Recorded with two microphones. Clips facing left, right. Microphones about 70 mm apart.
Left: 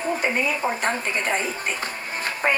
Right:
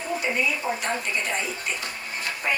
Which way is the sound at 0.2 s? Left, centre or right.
Left.